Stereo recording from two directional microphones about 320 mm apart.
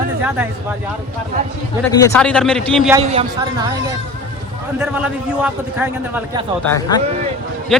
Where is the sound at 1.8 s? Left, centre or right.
Centre.